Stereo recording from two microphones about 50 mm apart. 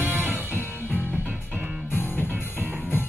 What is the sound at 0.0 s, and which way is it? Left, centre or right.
Music, right.